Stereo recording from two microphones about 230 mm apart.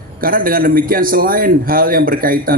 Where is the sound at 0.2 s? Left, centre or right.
Right.